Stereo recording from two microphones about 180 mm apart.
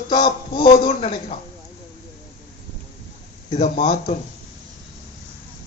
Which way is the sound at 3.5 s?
45° left (ahead or behind).